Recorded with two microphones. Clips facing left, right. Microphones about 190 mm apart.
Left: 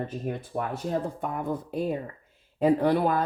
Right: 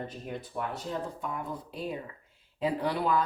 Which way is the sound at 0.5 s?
50° left (ahead or behind).